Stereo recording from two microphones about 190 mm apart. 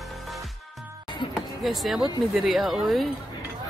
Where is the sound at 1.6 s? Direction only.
Centre (ahead or behind).